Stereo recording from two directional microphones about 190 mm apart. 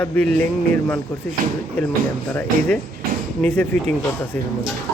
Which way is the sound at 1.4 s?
45° right (ahead or behind).